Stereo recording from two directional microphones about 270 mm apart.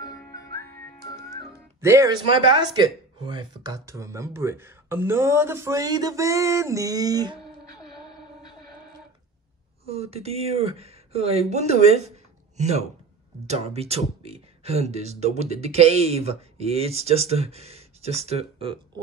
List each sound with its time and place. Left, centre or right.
0.1 s whistling: centre
1.8 s speech: centre
9.8 s speech: right